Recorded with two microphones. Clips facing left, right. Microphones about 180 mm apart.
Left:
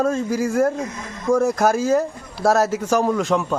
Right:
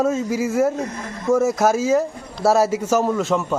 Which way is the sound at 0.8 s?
35° right (ahead or behind).